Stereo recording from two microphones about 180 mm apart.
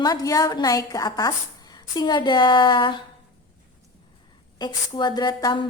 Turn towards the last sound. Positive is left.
turn(degrees=25)  # may be behind; listen again after turning